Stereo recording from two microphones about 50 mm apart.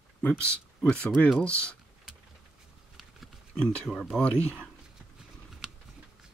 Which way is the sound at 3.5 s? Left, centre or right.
Centre.